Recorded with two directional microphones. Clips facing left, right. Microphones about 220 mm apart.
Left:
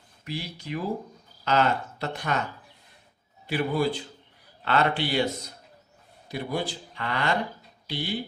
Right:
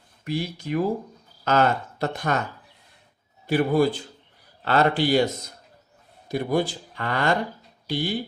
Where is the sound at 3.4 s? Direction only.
45° right (ahead or behind).